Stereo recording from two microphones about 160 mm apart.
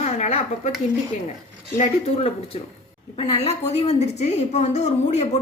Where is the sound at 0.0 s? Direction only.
45° left (ahead or behind).